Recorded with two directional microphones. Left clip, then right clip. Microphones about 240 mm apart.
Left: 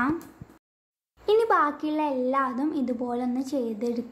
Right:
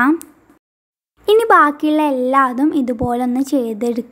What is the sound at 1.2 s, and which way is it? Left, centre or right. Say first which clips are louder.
A woman's voice: right 11 dB; right.